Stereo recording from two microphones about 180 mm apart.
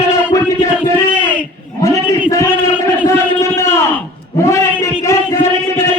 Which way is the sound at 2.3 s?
15° left (ahead or behind).